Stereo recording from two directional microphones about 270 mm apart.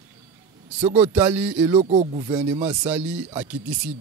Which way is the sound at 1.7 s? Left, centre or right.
Right.